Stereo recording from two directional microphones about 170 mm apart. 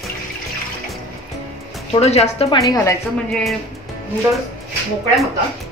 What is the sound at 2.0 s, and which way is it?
Speech, 40° left (ahead or behind).